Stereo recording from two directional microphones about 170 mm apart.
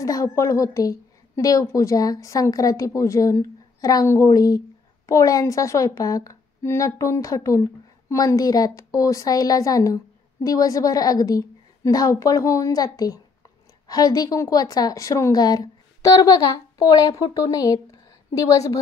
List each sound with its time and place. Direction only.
0.0 s a woman's voice: 20° left (ahead or behind)